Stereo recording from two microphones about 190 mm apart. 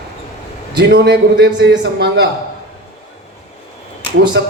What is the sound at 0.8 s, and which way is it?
A man's voice, 60° right (ahead or behind).